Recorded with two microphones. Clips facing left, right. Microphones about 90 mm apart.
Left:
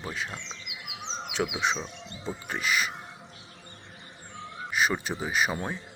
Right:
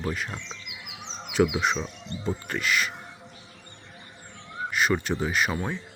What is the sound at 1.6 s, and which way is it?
Speech, centre (ahead or behind).